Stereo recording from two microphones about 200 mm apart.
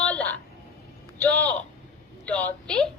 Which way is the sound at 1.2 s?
5° left (ahead or behind).